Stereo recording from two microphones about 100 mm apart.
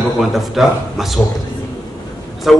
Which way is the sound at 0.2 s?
Centre (ahead or behind).